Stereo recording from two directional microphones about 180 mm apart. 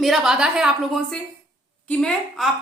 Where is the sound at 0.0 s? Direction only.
Centre (ahead or behind).